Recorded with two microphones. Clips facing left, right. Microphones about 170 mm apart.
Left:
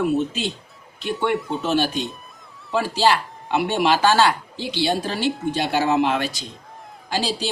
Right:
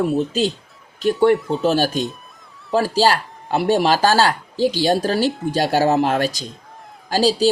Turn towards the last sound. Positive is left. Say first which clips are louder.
# right 7 dB
turn(degrees=-40)  # may be behind; listen again after turning